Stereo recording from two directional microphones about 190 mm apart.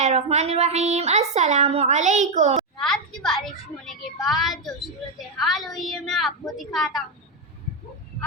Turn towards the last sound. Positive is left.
turn(degrees=0)  # may be behind; listen again after turning